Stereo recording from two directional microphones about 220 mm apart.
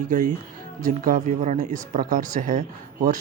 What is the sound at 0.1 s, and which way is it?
Speech, 35° right (ahead or behind).